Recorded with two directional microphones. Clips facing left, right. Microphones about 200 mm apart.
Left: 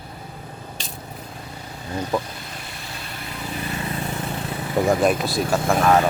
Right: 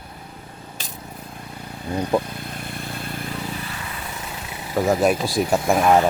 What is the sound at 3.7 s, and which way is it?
Vehicle, 30° left (ahead or behind).